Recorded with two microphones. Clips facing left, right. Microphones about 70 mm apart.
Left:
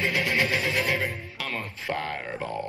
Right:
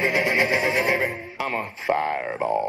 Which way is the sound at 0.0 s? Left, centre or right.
Right.